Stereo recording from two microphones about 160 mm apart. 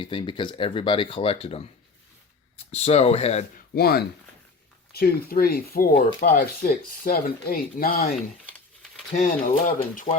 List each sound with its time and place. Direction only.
0.0 s speech: 30° left (ahead or behind)
2.7 s speech: 40° left (ahead or behind)
3.8 s speech: 75° left (ahead or behind)
9.1 s speech: 55° left (ahead or behind)